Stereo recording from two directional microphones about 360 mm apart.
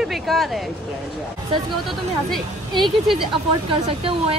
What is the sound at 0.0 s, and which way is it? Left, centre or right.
Speech, centre.